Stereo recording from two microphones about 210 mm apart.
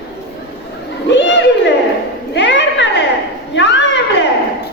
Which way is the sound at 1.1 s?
55° left (ahead or behind).